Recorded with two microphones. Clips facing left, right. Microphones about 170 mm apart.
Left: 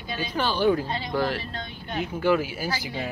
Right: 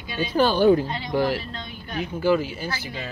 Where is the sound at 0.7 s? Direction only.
15° right (ahead or behind).